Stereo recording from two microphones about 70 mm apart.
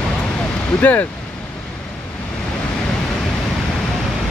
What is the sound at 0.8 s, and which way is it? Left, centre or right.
Speech, left.